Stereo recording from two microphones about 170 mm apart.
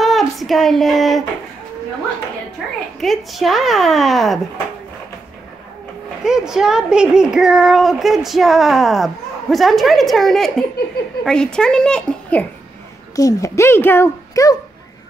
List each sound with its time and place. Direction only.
0.0 s a sound: centre (ahead or behind)
3.0 s speech: centre (ahead or behind)
6.2 s speech: 5° right (ahead or behind)
13.1 s speech: 20° left (ahead or behind)